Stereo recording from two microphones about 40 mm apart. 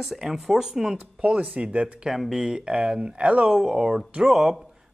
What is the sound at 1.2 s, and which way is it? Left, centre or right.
Speech, right.